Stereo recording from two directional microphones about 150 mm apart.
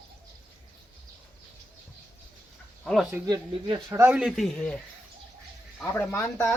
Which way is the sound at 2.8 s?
Centre (ahead or behind).